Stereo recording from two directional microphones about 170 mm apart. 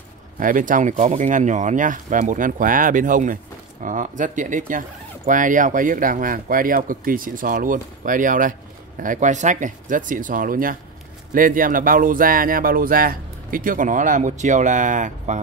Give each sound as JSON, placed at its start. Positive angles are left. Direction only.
{"t": 0.4, "sound": "speech", "side_deg": -50}